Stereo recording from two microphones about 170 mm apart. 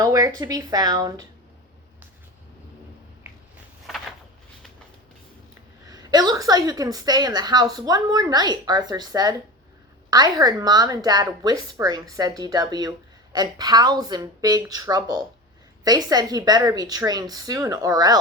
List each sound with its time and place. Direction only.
0.0 s a woman's voice: 20° right (ahead or behind)
5.9 s a woman's voice: 20° right (ahead or behind)